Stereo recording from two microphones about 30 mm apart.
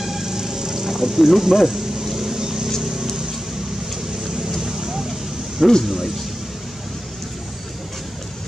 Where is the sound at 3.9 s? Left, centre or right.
Centre.